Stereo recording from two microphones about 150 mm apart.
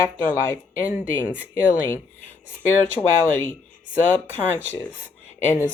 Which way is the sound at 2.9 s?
15° left (ahead or behind).